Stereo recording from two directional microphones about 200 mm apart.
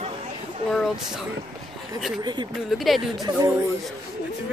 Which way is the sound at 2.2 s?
20° right (ahead or behind).